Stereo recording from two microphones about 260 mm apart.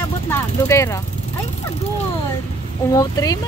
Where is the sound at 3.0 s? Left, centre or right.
Centre.